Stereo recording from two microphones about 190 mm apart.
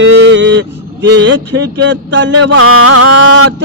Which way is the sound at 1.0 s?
65° right (ahead or behind).